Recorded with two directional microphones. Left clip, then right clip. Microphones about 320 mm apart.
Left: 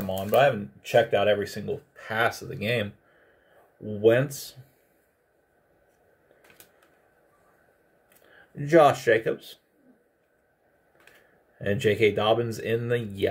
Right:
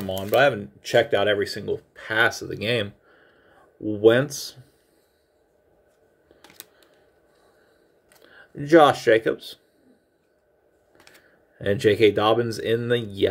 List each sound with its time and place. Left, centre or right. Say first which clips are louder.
0.0 s speech: right 2 dB; right
4.0 s speech: right 3 dB; right
8.5 s speech: right 3 dB; right
11.5 s speech: right 4 dB; right